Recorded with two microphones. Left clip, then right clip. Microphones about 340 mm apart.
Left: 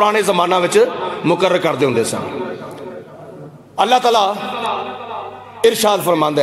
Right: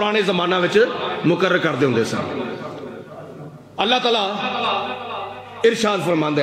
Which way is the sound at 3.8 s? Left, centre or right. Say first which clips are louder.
Left 5 dB; centre.